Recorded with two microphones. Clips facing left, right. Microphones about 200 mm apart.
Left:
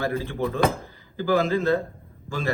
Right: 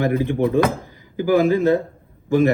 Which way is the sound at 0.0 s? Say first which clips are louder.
Right 7 dB; 15° right (ahead or behind).